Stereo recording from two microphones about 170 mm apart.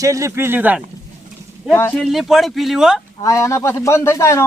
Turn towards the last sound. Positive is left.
turn(degrees=15)  # may be behind; listen again after turning